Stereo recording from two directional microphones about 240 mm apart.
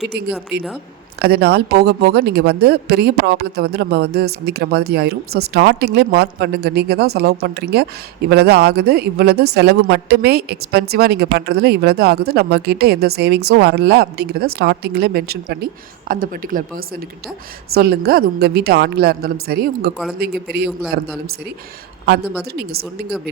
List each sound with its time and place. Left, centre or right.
0.5 s a woman's voice: right
22.5 s speech: right